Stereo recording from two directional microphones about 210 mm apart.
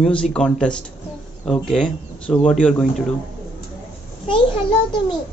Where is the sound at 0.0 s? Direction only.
5° left (ahead or behind).